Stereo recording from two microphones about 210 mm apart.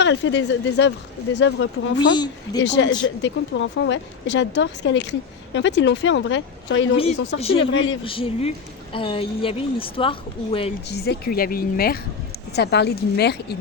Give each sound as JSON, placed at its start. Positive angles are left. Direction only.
{"t": 0.0, "sound": "speech", "side_deg": 60}
{"t": 2.1, "sound": "speech", "side_deg": 20}
{"t": 2.6, "sound": "speech", "side_deg": 60}
{"t": 6.9, "sound": "speech", "side_deg": 30}
{"t": 7.6, "sound": "speech", "side_deg": 60}
{"t": 8.0, "sound": "speech", "side_deg": 25}
{"t": 10.8, "sound": "a woman's voice", "side_deg": 50}